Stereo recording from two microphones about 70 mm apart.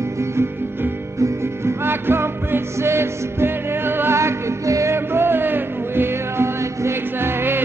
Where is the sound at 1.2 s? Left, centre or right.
Right.